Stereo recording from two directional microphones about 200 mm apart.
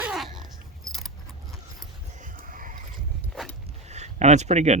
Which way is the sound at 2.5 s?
45° right (ahead or behind).